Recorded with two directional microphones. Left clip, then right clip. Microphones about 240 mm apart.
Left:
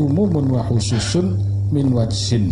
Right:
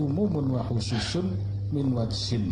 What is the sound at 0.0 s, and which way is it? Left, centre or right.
Mantra, left.